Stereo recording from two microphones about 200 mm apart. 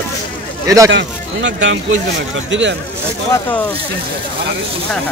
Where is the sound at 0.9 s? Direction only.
65° right (ahead or behind).